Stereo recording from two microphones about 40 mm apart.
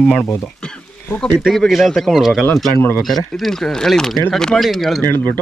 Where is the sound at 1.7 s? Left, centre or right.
Centre.